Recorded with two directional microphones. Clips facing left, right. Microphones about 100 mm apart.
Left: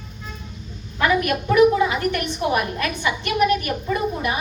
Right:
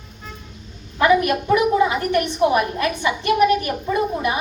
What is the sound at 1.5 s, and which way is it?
A woman's voice, 25° right (ahead or behind).